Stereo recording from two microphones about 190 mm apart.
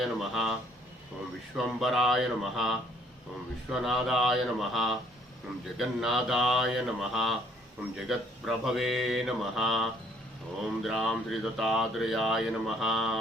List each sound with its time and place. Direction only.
0.0 s speech: centre (ahead or behind)
1.5 s speech: centre (ahead or behind)